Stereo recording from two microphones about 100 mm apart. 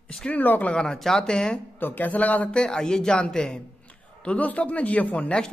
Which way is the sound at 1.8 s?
20° left (ahead or behind).